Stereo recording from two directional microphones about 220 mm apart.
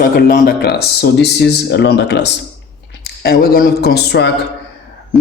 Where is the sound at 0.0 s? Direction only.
40° left (ahead or behind).